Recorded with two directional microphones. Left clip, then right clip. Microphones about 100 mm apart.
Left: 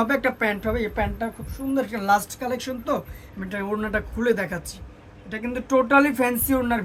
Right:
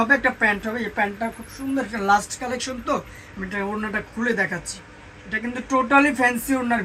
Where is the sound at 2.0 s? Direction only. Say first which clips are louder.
Right 3 dB; 35° left (ahead or behind).